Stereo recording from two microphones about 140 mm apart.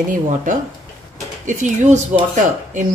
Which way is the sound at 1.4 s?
65° right (ahead or behind).